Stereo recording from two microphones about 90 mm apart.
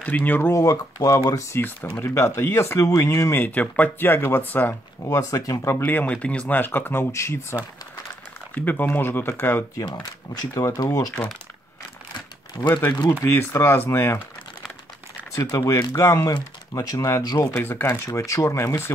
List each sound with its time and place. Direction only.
0.0 s speech: 20° left (ahead or behind)
0.5 s speech: 35° left (ahead or behind)
3.3 s speech: 15° left (ahead or behind)
5.0 s speech: 40° left (ahead or behind)
5.8 s speech: 15° left (ahead or behind); by 7.5 s 35° left (ahead or behind)
8.5 s speech: 20° left (ahead or behind)
10.5 s speech: 40° left (ahead or behind)
12.6 s speech: 40° left (ahead or behind)
13.2 s speech: 30° left (ahead or behind)
15.3 s speech: 35° left (ahead or behind)
17.4 s speech: 30° left (ahead or behind)
18.0 s speech: 40° left (ahead or behind)